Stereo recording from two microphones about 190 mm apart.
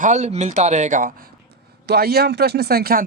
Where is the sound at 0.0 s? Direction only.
40° right (ahead or behind).